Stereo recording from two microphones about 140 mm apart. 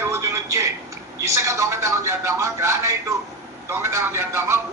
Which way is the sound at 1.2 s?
20° right (ahead or behind).